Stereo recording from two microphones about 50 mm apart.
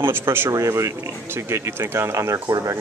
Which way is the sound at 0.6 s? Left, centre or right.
Right.